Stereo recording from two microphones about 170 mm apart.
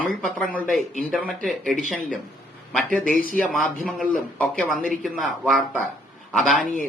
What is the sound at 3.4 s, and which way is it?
Speech, 5° left (ahead or behind).